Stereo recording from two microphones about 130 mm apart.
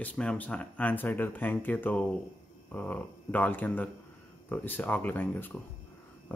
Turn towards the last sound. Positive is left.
turn(degrees=15)  # may be behind; listen again after turning